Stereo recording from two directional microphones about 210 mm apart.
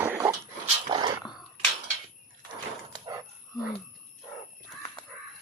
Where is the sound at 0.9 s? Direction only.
20° right (ahead or behind).